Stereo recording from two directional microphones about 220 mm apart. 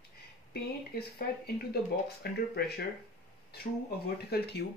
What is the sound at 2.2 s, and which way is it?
Speech, 45° left (ahead or behind).